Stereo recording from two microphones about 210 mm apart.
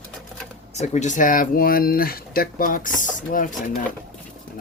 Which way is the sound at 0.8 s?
35° left (ahead or behind).